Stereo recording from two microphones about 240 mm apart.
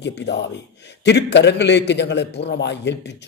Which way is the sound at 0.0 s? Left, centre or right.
Left.